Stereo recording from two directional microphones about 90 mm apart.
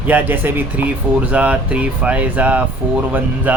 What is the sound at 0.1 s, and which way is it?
Speech, 20° right (ahead or behind).